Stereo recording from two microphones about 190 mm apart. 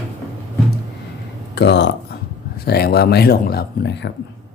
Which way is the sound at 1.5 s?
65° left (ahead or behind).